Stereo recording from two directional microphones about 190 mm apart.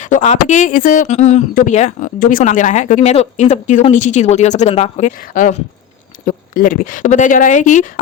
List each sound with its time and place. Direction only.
0.0 s speech: 40° left (ahead or behind)